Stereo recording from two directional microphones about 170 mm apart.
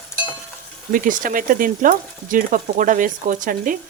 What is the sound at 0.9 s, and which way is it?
Stir, 55° right (ahead or behind).